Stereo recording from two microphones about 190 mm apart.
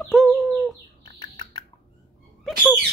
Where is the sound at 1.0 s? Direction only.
25° left (ahead or behind).